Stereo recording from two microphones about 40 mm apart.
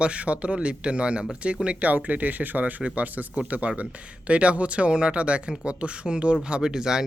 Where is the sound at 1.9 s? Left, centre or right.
Right.